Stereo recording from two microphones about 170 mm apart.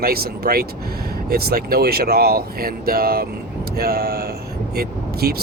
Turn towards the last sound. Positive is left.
turn(degrees=-65)  # may be behind; listen again after turning